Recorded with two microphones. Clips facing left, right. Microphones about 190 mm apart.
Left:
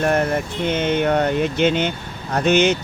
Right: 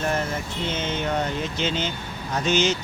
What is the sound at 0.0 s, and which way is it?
Speech, 60° left (ahead or behind).